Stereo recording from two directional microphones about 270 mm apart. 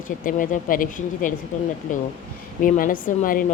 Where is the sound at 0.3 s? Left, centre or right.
Left.